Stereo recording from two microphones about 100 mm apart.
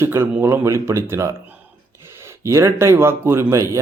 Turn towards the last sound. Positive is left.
turn(degrees=-30)  # may be behind; listen again after turning